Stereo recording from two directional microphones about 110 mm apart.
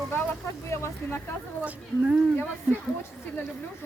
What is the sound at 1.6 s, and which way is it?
Speech, 10° right (ahead or behind).